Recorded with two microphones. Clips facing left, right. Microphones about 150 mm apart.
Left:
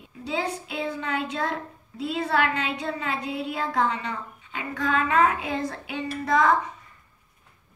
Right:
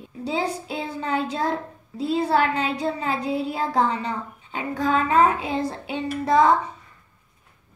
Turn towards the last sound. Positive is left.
turn(degrees=-30)  # may be behind; listen again after turning